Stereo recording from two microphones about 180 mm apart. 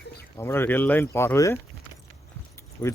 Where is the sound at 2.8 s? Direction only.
20° left (ahead or behind).